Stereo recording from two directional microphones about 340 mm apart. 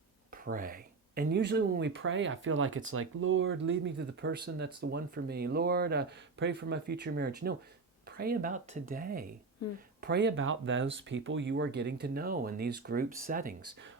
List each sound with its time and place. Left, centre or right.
0.4 s speech: right
9.6 s speech: left
10.0 s speech: right